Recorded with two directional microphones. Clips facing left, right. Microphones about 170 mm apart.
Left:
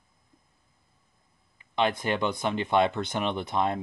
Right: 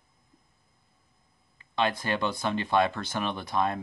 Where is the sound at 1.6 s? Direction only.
20° left (ahead or behind).